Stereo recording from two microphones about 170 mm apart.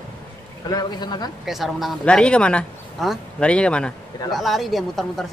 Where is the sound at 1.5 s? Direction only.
Centre (ahead or behind).